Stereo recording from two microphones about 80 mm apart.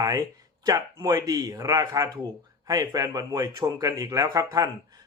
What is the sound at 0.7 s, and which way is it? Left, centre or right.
Speech, right.